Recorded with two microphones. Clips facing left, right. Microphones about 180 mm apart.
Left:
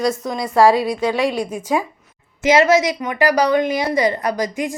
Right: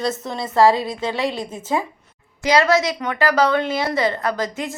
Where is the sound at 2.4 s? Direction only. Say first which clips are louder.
Left 3 dB; 20° left (ahead or behind).